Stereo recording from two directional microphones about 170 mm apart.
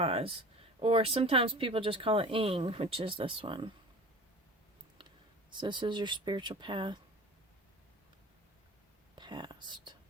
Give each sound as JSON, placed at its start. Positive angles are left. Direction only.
{"t": 0.0, "sound": "speech", "side_deg": -35}
{"t": 5.5, "sound": "speech", "side_deg": -25}
{"t": 9.1, "sound": "speech", "side_deg": -25}